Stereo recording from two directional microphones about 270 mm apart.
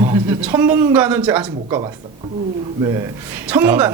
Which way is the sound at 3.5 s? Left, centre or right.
Centre.